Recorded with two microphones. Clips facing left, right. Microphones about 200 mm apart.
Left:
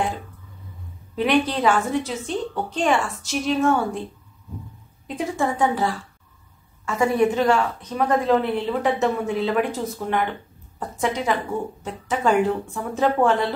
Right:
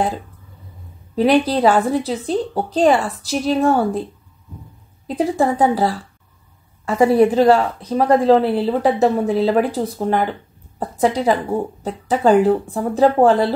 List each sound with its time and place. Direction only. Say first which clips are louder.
1.1 s a woman's voice: right 5 dB; 35° right (ahead or behind)
5.0 s a woman's voice: right 6 dB; 35° right (ahead or behind)